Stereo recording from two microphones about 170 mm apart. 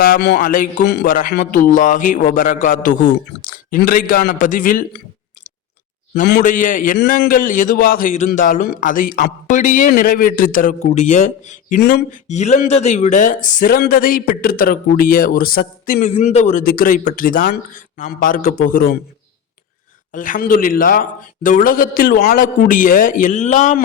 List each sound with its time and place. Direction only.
0.0 s a man's voice: 65° left (ahead or behind)
0.8 s a man's voice: 75° left (ahead or behind)
1.1 s speech: 55° left (ahead or behind)
6.4 s speech: 50° left (ahead or behind)
11.8 s a man's voice: 70° left (ahead or behind)
12.1 s speech: 40° left (ahead or behind)
20.1 s a man's voice: 55° left (ahead or behind)